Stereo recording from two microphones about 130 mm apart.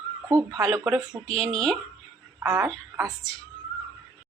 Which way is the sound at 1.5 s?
5° left (ahead or behind).